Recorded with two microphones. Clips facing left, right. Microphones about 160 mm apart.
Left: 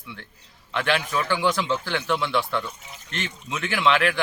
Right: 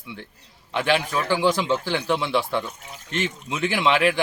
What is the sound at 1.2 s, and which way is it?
Speech, 30° right (ahead or behind).